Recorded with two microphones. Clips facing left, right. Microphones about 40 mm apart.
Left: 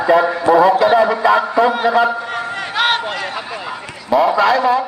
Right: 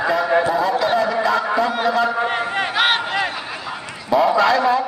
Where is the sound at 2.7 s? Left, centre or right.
Centre.